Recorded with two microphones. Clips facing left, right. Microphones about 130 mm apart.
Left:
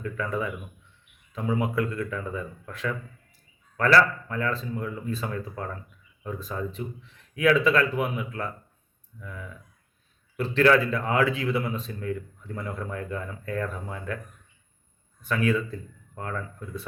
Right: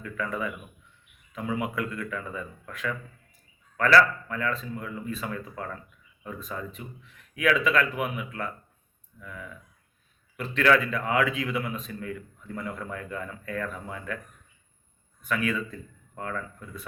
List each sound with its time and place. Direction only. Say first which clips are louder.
0.0 s speech: left 3 dB; 30° left (ahead or behind)
1.5 s speech: left 4 dB; 30° left (ahead or behind)
3.9 s speech: right 1 dB; 30° left (ahead or behind)
15.2 s speech: left 3 dB; 30° left (ahead or behind)